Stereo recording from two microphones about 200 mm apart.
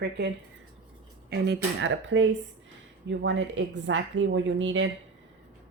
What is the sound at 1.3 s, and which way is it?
Speech, 50° right (ahead or behind).